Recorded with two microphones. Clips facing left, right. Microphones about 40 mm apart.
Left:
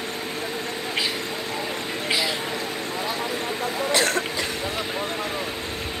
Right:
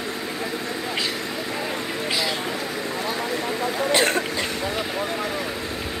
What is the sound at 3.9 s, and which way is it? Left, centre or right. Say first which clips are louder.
Throat clearing: right 2 dB; right.